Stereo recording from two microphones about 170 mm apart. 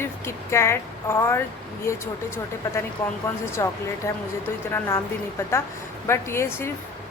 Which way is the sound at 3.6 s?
15° left (ahead or behind).